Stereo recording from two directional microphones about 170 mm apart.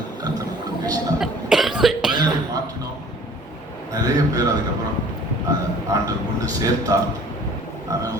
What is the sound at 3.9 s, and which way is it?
Speech, 20° right (ahead or behind).